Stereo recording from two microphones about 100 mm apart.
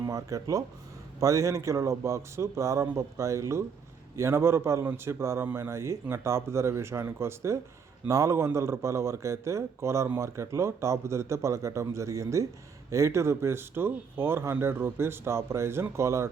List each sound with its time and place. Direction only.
0.0 s speech: 35° right (ahead or behind)